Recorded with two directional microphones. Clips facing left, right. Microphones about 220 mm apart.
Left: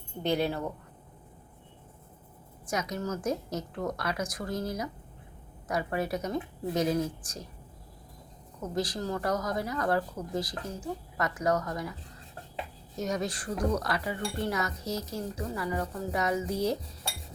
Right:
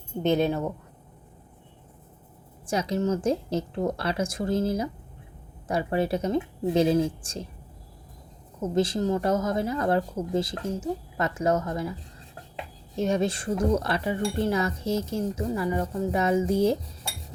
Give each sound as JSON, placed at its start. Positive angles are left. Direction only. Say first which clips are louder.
{"t": 0.2, "sound": "speech", "louder": "right 5 dB", "side_deg": -20}
{"t": 2.6, "sound": "speech", "louder": "right 7 dB", "side_deg": -30}
{"t": 8.6, "sound": "speech", "louder": "right 8 dB", "side_deg": -25}
{"t": 13.0, "sound": "speech", "louder": "right 7 dB", "side_deg": -25}